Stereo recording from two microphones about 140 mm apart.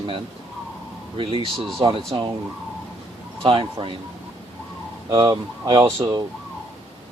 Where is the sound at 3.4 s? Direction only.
40° right (ahead or behind).